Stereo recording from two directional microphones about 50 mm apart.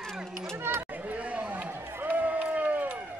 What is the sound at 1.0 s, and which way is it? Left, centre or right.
Chatter, right.